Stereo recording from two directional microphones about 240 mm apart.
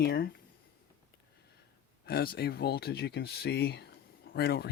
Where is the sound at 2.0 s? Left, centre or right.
Left.